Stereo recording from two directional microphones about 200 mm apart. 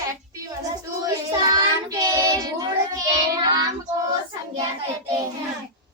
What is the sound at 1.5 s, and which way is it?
Child singing, 20° right (ahead or behind).